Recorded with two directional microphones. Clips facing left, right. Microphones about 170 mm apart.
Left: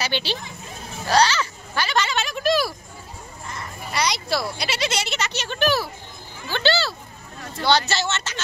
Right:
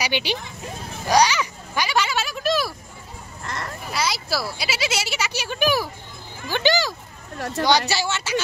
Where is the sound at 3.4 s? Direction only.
80° right.